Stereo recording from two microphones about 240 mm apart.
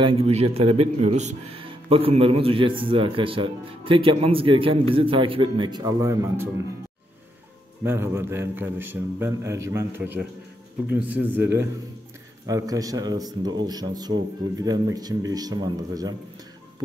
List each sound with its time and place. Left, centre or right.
0.0 s a man's voice: right
7.8 s a man's voice: centre